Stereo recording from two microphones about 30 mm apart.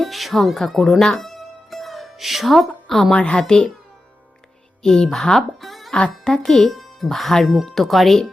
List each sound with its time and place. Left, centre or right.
0.0 s speech: centre
1.1 s music: centre
2.8 s a woman's voice: centre
3.2 s a child's voice: left
4.8 s speech: centre
5.5 s music: centre
5.9 s speech: left
6.4 s speech: centre
6.7 s speech: centre
7.4 s speech: centre